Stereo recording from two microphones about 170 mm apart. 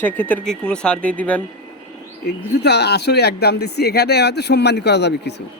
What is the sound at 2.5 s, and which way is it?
Speech, 75° left (ahead or behind).